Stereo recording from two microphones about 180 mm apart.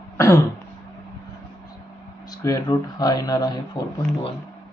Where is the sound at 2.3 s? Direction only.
20° left (ahead or behind).